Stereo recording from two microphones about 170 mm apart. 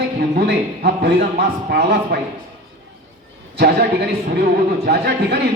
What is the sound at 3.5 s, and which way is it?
Speech, 70° right (ahead or behind).